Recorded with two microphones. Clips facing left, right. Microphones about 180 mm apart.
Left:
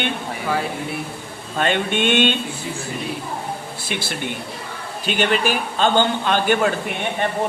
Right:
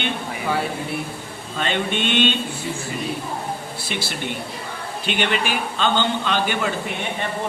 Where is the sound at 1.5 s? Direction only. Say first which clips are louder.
Left 3 dB; 50° left (ahead or behind).